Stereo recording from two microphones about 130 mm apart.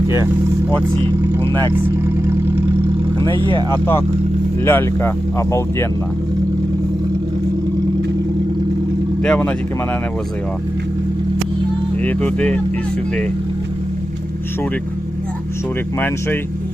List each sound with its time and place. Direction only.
1.4 s speech: 20° left (ahead or behind)
3.3 s speech: 40° right (ahead or behind)
4.6 s speech: 20° left (ahead or behind)
9.2 s speech: 10° left (ahead or behind)
12.0 s speech: 10° left (ahead or behind)
16.0 s speech: 15° left (ahead or behind)